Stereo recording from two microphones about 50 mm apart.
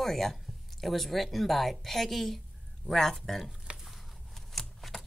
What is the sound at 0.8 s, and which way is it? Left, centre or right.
A woman's voice, centre.